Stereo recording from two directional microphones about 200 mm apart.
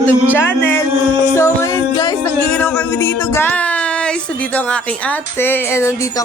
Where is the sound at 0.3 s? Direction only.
10° left (ahead or behind).